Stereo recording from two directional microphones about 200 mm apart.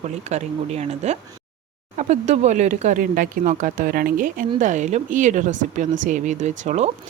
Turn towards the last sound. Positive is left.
turn(degrees=-35)  # may be behind; listen again after turning